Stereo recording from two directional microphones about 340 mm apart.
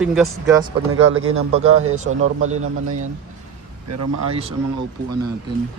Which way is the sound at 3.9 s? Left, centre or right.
Right.